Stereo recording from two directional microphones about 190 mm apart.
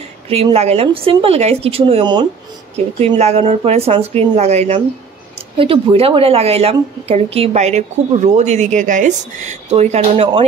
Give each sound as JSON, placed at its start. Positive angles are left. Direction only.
{"t": 0.3, "sound": "a woman's voice", "side_deg": -30}